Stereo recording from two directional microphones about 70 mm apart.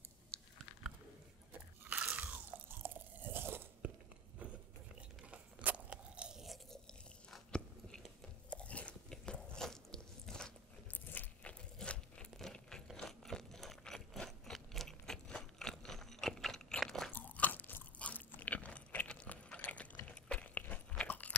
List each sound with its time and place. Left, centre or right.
1.5 s crunch: right
2.0 s biting: right
2.7 s crunch: right
5.3 s biting: right
6.4 s crunch: centre
6.9 s chewing: centre
10.9 s crunch: left
11.8 s crunch: centre
12.4 s a sound: centre
16.8 s crunch: centre
17.1 s crunch: left
20.1 s a sound: centre
21.1 s chewing: left